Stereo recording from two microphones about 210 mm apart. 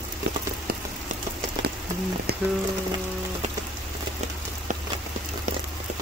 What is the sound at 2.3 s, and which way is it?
Music, 50° right (ahead or behind).